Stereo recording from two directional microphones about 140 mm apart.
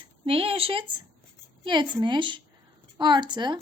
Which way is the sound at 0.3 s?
40° right (ahead or behind).